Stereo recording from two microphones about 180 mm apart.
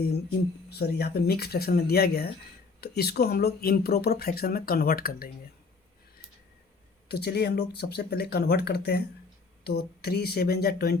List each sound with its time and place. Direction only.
0.7 s speech: 65° left (ahead or behind)
7.1 s speech: 65° left (ahead or behind)